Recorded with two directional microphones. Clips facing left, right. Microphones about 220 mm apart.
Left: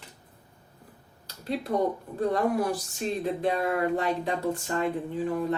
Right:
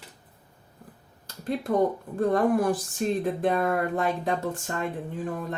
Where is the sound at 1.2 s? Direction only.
50° right (ahead or behind).